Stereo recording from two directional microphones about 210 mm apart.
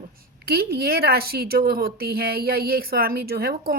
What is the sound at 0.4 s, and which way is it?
Speech, 45° right (ahead or behind).